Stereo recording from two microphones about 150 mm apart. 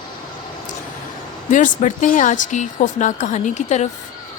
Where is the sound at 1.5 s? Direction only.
60° left (ahead or behind).